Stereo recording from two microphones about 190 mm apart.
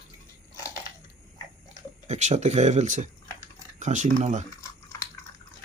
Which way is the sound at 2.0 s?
40° right (ahead or behind).